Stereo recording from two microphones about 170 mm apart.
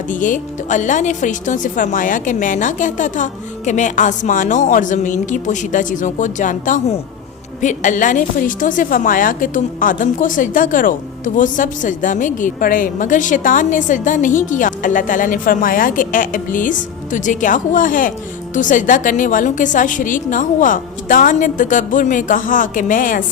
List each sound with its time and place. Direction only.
0.1 s a woman's voice: 50° left (ahead or behind)